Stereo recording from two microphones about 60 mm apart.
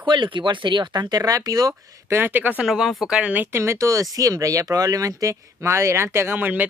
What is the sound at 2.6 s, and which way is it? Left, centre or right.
Speech, centre.